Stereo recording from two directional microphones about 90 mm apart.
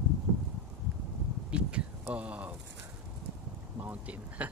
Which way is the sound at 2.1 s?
15° right (ahead or behind).